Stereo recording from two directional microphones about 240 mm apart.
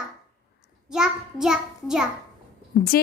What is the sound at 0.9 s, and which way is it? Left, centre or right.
Child singing, centre.